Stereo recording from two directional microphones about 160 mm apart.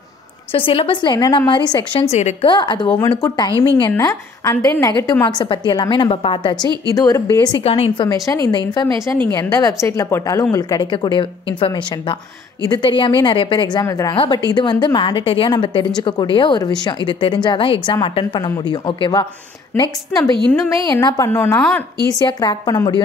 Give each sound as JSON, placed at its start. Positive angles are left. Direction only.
{"t": 0.5, "sound": "speech", "side_deg": 35}
{"t": 2.4, "sound": "a woman's voice", "side_deg": 30}
{"t": 3.9, "sound": "a woman's voice", "side_deg": 15}
{"t": 5.1, "sound": "a woman's voice", "side_deg": 10}
{"t": 5.4, "sound": "speech", "side_deg": 30}
{"t": 6.9, "sound": "a woman's voice", "side_deg": 20}
{"t": 7.6, "sound": "speech", "side_deg": 35}
{"t": 8.1, "sound": "a woman's voice", "side_deg": 20}
{"t": 14.1, "sound": "a woman's voice", "side_deg": 35}
{"t": 20.8, "sound": "a woman's voice", "side_deg": 20}
{"t": 21.5, "sound": "speech", "side_deg": 5}
{"t": 22.1, "sound": "a woman's voice", "side_deg": 25}